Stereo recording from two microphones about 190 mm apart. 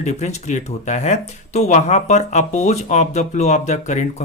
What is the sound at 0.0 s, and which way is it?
Speech, 35° left (ahead or behind).